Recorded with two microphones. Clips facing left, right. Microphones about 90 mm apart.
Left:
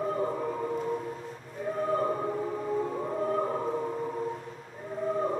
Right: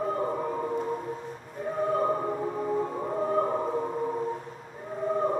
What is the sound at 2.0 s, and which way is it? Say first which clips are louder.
Music: right 2 dB; 5° right (ahead or behind).